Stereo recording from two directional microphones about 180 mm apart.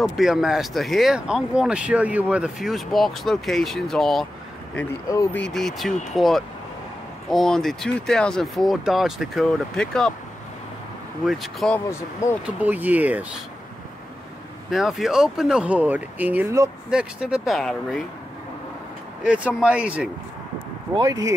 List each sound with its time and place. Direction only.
0.0 s speech: centre (ahead or behind)
5.0 s speech: 20° left (ahead or behind)
5.5 s speech: centre (ahead or behind)
11.2 s speech: centre (ahead or behind)
11.9 s speech: 15° left (ahead or behind)
12.5 s speech: 10° right (ahead or behind)
14.7 s speech: centre (ahead or behind); by 16.7 s 15° right (ahead or behind)
16.9 s speech: 5° right (ahead or behind)
19.2 s speech: 5° right (ahead or behind)
20.9 s speech: 20° right (ahead or behind)